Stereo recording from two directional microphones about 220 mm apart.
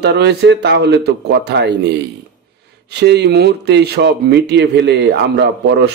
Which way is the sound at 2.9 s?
50° right (ahead or behind).